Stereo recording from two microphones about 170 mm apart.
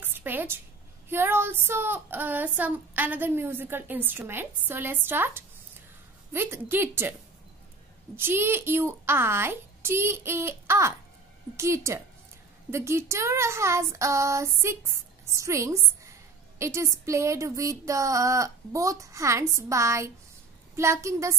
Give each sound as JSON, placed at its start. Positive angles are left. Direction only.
{"t": 0.0, "sound": "a sound", "side_deg": -10}
{"t": 1.0, "sound": "speech", "side_deg": -15}
{"t": 8.2, "sound": "a woman's voice", "side_deg": -15}